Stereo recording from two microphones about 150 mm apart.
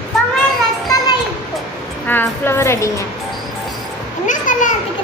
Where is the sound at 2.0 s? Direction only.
15° left (ahead or behind).